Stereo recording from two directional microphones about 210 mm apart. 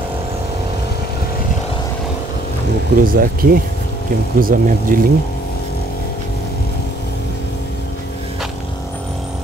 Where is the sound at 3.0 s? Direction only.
45° right (ahead or behind).